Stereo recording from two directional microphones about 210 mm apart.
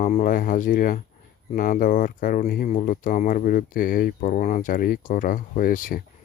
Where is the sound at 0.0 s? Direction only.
35° left (ahead or behind).